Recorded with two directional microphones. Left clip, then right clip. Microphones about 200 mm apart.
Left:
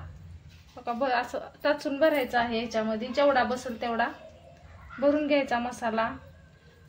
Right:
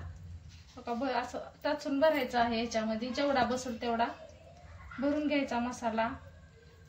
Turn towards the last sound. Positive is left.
turn(degrees=40)  # may be behind; listen again after turning